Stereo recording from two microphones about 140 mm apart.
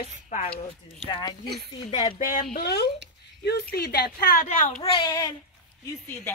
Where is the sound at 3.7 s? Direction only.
90° left.